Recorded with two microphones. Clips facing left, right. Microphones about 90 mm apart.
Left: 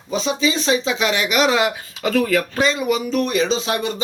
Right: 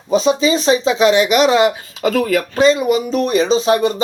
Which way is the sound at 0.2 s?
40° right (ahead or behind).